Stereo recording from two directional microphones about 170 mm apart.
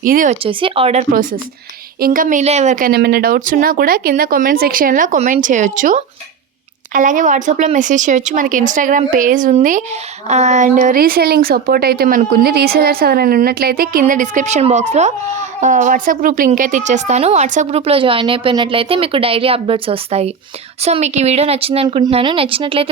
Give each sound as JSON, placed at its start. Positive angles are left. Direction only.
{"t": 0.0, "sound": "speech", "side_deg": -50}
{"t": 0.4, "sound": "speech", "side_deg": -35}
{"t": 1.1, "sound": "speech", "side_deg": -55}
{"t": 14.0, "sound": "speech", "side_deg": -50}